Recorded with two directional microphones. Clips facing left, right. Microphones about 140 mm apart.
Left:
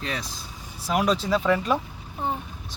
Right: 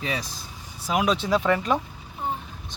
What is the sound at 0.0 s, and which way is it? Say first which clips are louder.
Speech: right 2 dB; 5° right (ahead or behind).